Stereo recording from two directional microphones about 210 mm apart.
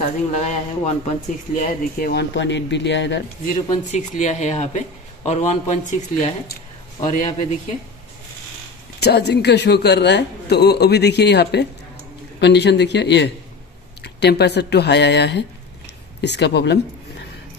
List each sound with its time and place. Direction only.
0.4 s speech: 30° left (ahead or behind); by 3.2 s 60° left (ahead or behind)
3.9 s a man's voice: 35° left (ahead or behind)
9.0 s speech: 50° left (ahead or behind)